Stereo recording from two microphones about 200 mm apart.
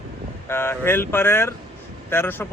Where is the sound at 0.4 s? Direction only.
10° left (ahead or behind).